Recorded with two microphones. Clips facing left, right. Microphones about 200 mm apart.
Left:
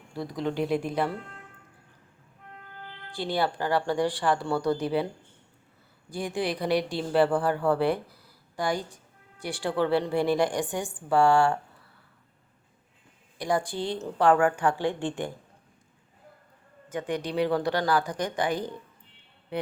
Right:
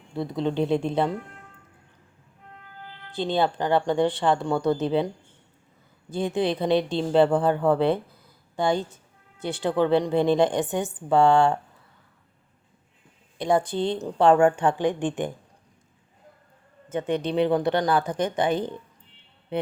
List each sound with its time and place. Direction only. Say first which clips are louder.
0.1 s a woman's voice: right 4 dB; 25° right (ahead or behind)
3.1 s a woman's voice: right 4 dB; 20° right (ahead or behind)
6.1 s a woman's voice: right 5 dB; 20° right (ahead or behind)
13.4 s a woman's voice: right 5 dB; 25° right (ahead or behind)
16.9 s a woman's voice: right 5 dB; 25° right (ahead or behind)